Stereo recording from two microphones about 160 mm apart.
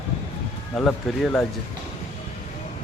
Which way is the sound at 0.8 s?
5° left (ahead or behind).